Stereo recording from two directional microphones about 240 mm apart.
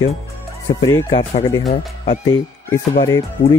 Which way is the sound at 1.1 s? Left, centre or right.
Left.